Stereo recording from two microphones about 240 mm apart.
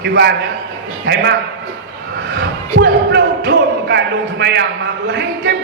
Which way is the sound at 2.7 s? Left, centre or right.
Right.